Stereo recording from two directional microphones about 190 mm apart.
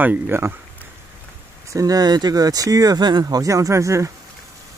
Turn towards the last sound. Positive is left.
turn(degrees=-15)  # may be behind; listen again after turning